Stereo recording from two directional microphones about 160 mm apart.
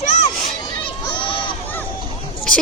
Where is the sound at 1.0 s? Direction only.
30° left (ahead or behind).